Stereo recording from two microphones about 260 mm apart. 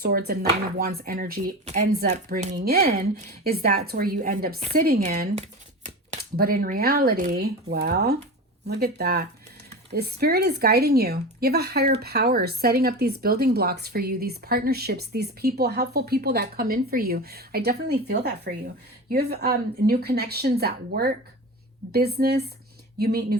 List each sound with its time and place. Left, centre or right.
0.0 s speech: right